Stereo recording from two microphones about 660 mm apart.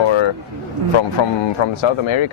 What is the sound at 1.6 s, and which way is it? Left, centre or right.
Speech, left.